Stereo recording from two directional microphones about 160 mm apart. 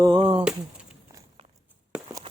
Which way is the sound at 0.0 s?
30° right (ahead or behind).